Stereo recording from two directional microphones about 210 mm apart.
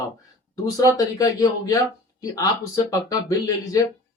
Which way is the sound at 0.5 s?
15° left (ahead or behind).